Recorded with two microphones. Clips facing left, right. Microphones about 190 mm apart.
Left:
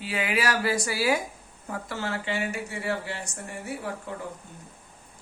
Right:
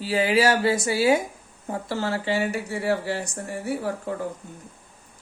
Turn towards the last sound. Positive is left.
turn(degrees=-40)  # may be behind; listen again after turning